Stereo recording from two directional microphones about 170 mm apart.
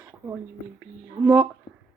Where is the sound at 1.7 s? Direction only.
30° left (ahead or behind).